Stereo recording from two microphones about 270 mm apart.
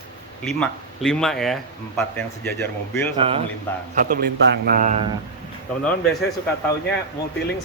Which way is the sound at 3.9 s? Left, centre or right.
Right.